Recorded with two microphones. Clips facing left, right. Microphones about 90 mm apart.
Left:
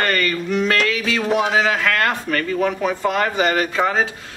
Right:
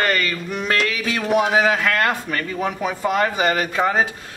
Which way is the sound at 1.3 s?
15° right (ahead or behind).